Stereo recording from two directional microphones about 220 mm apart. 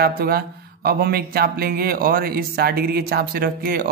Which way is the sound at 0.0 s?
45° right (ahead or behind).